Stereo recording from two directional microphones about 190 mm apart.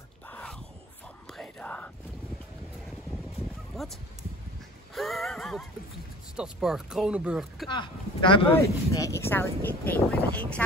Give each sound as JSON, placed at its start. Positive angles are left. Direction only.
{"t": 0.3, "sound": "a sound", "side_deg": 10}
{"t": 1.3, "sound": "whispering", "side_deg": 5}
{"t": 3.7, "sound": "speech", "side_deg": 0}
{"t": 4.9, "sound": "a sound", "side_deg": 0}
{"t": 6.3, "sound": "speech", "side_deg": -5}
{"t": 7.7, "sound": "speech", "side_deg": 25}
{"t": 8.5, "sound": "speech", "side_deg": 15}